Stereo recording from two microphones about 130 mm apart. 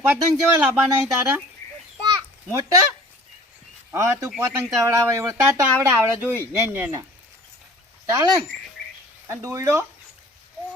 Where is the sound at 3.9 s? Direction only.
20° right (ahead or behind).